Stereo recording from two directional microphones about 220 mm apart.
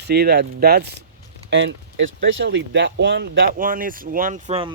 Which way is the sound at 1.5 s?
55° right (ahead or behind).